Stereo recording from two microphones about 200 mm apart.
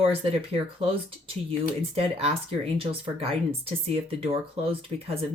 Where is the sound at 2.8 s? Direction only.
30° right (ahead or behind).